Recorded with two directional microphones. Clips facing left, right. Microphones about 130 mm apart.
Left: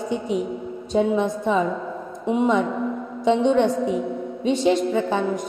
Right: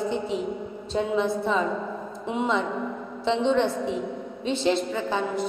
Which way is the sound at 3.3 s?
10° left (ahead or behind).